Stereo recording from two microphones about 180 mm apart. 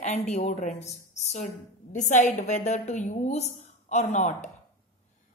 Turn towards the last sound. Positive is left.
turn(degrees=40)  # may be behind; listen again after turning